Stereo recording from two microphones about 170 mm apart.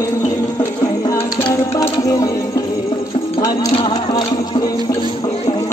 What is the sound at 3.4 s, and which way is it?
Music, 25° left (ahead or behind).